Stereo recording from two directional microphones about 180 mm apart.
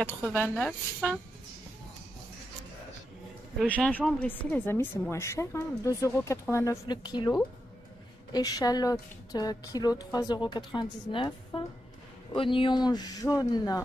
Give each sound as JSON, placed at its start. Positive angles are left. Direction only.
{"t": 0.6, "sound": "speech", "side_deg": 5}
{"t": 3.6, "sound": "speech", "side_deg": 10}